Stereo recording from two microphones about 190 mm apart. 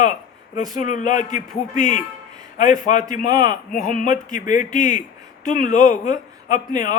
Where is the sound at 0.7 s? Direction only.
40° left (ahead or behind).